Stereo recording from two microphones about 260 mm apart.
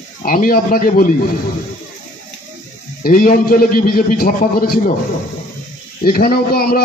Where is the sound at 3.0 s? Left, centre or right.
Left.